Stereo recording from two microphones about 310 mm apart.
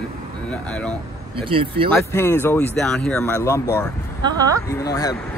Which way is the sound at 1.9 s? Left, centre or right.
Centre.